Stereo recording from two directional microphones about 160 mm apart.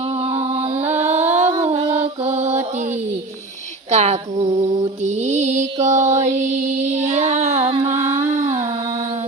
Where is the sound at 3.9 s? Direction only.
45° right (ahead or behind).